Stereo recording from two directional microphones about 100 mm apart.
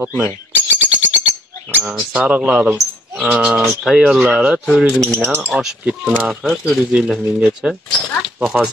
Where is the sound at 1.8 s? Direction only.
5° right (ahead or behind).